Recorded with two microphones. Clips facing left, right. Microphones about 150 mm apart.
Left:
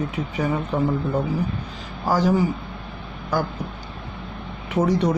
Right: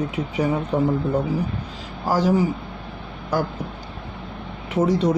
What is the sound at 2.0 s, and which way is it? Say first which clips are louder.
Speech: even; 5° right (ahead or behind).